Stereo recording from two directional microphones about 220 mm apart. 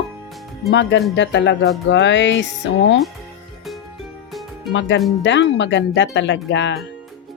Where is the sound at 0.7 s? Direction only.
55° left (ahead or behind).